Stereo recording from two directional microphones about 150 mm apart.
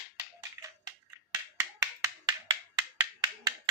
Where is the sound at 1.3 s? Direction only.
20° right (ahead or behind).